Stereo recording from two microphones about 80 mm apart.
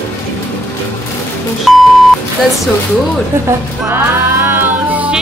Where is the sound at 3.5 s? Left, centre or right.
Right.